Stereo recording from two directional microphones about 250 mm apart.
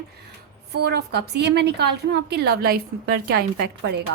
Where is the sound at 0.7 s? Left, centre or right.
Right.